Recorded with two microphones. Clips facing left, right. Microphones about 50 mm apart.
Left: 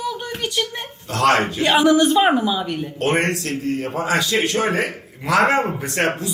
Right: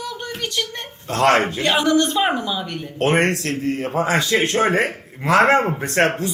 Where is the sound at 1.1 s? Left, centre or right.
Right.